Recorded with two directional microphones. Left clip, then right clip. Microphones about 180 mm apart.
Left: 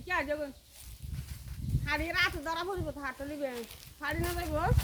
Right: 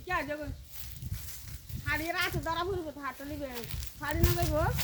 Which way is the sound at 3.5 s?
30° right (ahead or behind).